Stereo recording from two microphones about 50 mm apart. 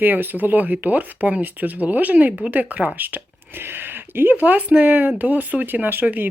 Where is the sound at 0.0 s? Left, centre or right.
Right.